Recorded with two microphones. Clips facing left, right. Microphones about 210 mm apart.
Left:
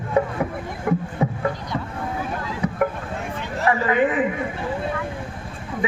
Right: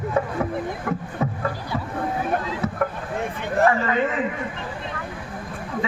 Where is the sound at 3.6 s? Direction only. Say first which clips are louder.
Right 3 dB; 50° right (ahead or behind).